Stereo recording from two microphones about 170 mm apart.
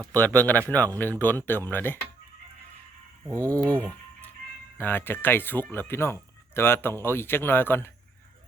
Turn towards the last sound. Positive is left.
turn(degrees=10)  # may be behind; listen again after turning